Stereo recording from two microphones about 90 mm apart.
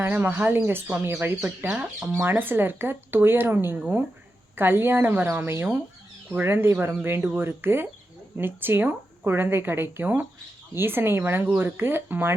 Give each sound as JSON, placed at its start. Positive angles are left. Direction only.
{"t": 0.0, "sound": "a woman's voice", "side_deg": -20}
{"t": 1.7, "sound": "speech", "side_deg": -10}
{"t": 2.4, "sound": "a woman's voice", "side_deg": -25}